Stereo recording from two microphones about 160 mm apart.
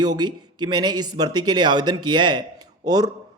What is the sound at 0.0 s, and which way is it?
Speech, 25° right (ahead or behind).